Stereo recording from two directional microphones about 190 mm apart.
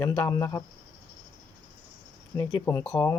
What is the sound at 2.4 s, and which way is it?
Speech, 15° left (ahead or behind).